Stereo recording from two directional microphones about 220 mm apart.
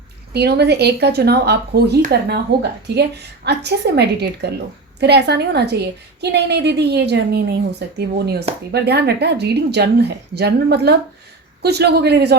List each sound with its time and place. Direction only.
0.3 s speech: 45° right (ahead or behind)